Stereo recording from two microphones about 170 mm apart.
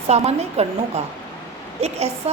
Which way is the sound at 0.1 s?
40° right (ahead or behind).